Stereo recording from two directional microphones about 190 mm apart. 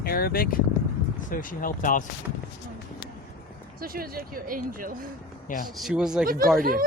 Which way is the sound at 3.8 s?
50° right (ahead or behind).